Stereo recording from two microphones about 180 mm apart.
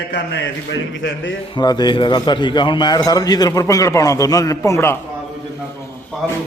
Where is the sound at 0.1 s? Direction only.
75° left (ahead or behind).